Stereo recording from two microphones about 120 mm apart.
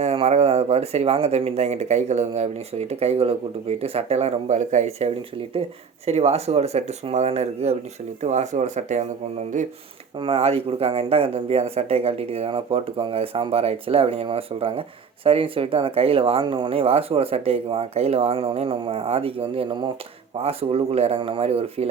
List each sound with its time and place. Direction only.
0.0 s speech: 60° right (ahead or behind)
8.2 s speech: 75° right (ahead or behind); by 9.7 s 90° right
10.2 s speech: 55° right (ahead or behind)
20.4 s speech: 55° right (ahead or behind)